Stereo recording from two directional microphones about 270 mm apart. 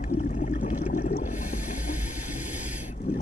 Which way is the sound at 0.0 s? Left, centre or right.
Left.